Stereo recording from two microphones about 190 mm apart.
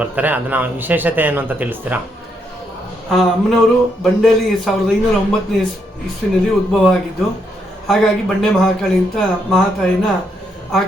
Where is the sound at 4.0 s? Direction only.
Centre (ahead or behind).